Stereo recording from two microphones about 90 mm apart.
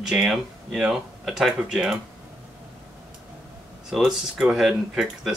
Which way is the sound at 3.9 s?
5° right (ahead or behind).